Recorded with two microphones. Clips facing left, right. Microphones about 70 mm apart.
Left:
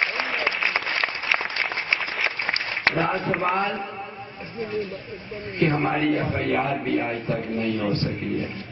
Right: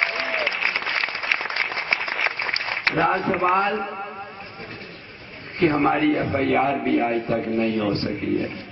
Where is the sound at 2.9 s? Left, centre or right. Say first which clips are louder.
Right 7 dB; centre.